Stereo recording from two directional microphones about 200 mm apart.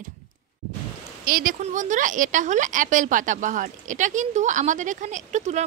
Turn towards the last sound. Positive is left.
turn(degrees=-35)  # may be behind; listen again after turning